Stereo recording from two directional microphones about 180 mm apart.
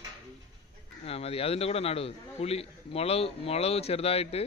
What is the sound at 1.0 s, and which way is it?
A man's voice, 35° left (ahead or behind).